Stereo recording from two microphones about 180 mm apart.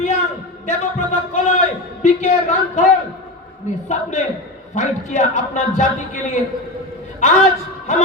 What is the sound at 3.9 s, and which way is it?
A man's voice, 40° left (ahead or behind).